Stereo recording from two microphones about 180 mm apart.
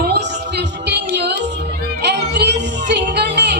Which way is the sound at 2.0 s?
70° right (ahead or behind).